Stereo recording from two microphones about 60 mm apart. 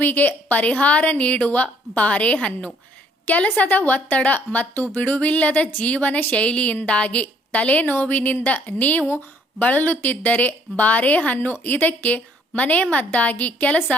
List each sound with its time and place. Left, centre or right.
0.0 s speech: left